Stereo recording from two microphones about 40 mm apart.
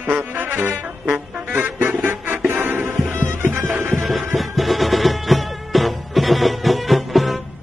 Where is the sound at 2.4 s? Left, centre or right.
Right.